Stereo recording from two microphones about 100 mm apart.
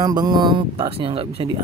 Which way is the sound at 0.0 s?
45° right (ahead or behind).